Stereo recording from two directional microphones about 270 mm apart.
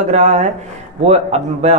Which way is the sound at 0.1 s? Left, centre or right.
Right.